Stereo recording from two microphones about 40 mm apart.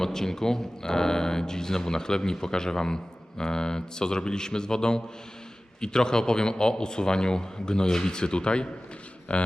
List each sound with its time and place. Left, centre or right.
0.0 s a man's voice: centre; by 9.5 s left